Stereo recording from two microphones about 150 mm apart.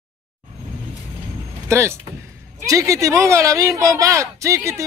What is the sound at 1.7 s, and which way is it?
Speech, 20° right (ahead or behind).